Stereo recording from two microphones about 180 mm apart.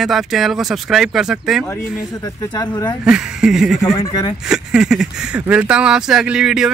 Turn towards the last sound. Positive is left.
turn(degrees=-5)  # may be behind; listen again after turning